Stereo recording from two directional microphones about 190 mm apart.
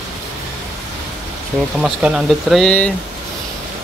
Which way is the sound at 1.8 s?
5° right (ahead or behind).